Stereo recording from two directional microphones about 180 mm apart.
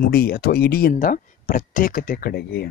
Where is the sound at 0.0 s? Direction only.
60° left (ahead or behind).